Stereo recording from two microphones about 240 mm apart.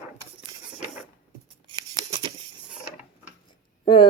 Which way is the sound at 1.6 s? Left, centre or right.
Centre.